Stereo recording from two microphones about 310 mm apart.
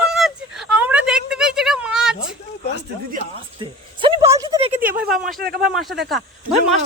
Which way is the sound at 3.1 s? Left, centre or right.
Centre.